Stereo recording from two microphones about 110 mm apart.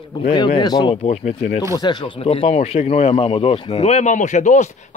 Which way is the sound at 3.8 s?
85° left.